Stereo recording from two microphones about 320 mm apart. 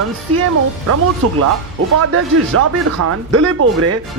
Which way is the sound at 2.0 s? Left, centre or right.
Right.